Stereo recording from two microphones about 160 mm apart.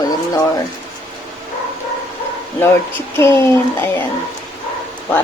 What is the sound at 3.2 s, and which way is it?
Speech, 15° left (ahead or behind).